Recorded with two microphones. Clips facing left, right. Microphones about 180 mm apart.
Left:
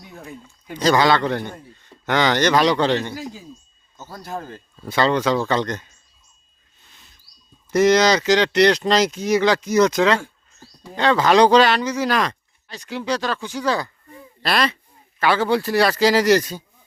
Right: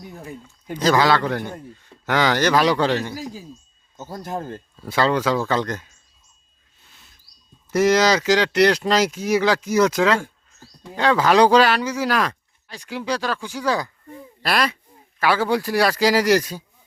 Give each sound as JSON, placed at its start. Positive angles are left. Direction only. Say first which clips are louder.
{"t": 0.8, "sound": "a man's voice", "louder": "left 1 dB", "side_deg": -5}
{"t": 3.9, "sound": "speech", "louder": "right 4 dB", "side_deg": -20}
{"t": 4.8, "sound": "a man's voice", "louder": "left 1 dB", "side_deg": -5}
{"t": 7.7, "sound": "speech", "louder": "left 2 dB", "side_deg": -5}